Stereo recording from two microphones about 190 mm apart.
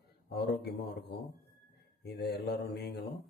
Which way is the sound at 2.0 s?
60° left (ahead or behind).